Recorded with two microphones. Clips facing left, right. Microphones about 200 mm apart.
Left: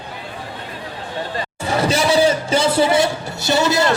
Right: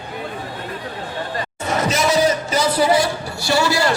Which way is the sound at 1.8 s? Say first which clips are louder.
Left 2 dB; 30° left (ahead or behind).